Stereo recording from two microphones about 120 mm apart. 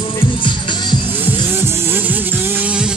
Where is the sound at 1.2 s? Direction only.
15° right (ahead or behind).